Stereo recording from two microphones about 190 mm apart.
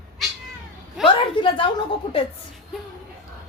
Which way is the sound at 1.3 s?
25° left (ahead or behind).